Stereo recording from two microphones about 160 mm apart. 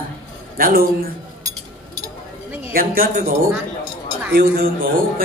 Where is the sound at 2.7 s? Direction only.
65° right (ahead or behind).